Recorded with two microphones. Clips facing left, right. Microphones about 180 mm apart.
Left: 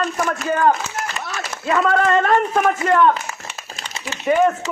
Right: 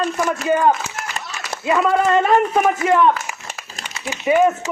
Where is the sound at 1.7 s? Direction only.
5° right (ahead or behind).